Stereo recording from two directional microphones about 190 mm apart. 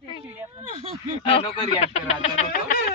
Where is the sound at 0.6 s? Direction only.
35° right (ahead or behind).